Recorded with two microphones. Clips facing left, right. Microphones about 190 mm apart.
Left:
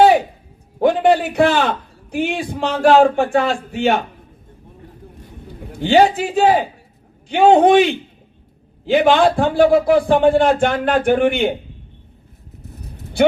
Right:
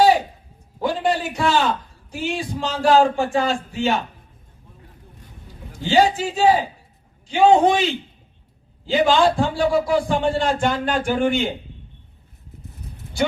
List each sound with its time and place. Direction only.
0.8 s a man's voice: 60° left (ahead or behind)
5.7 s speech: 60° left (ahead or behind)